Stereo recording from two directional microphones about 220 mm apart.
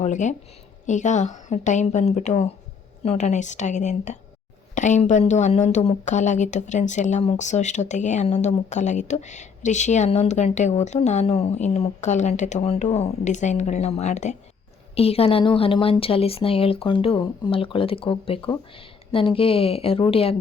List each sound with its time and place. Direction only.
0.0 s a woman's voice: 35° left (ahead or behind)